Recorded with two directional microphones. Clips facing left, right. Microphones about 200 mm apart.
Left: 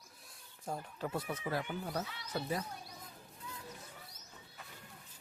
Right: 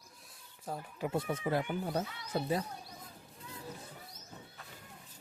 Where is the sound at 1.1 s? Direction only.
25° right (ahead or behind).